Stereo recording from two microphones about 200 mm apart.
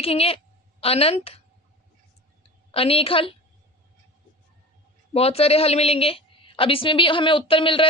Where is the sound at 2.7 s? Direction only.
30° left (ahead or behind).